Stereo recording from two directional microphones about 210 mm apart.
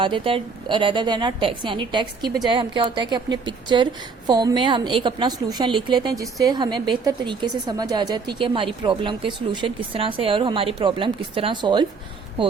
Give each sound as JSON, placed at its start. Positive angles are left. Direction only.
{"t": 0.0, "sound": "a woman's voice", "side_deg": -25}